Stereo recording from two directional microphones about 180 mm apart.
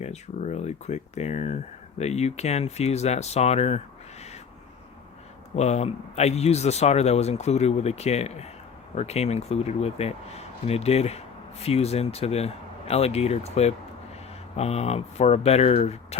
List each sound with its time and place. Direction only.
0.0 s speech: 40° left (ahead or behind)
5.5 s speech: 35° left (ahead or behind)